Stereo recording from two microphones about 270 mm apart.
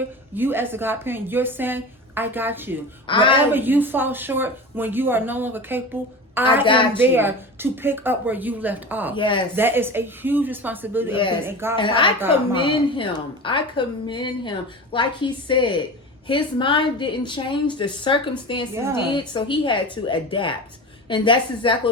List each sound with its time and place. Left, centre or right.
0.3 s a woman's voice: centre
3.1 s a woman's voice: centre
3.5 s a woman's voice: centre
9.1 s a woman's voice: centre
9.6 s a woman's voice: centre
11.8 s a woman's voice: centre